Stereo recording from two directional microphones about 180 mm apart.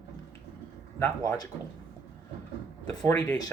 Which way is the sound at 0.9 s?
20° left (ahead or behind).